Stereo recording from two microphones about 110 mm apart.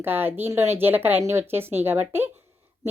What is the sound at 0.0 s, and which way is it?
A woman's voice, 20° right (ahead or behind).